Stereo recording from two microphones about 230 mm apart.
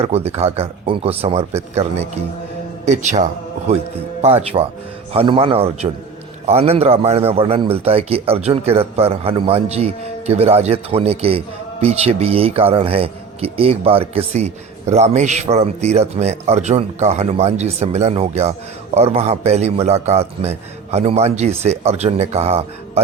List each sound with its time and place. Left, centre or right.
0.0 s a man's voice: right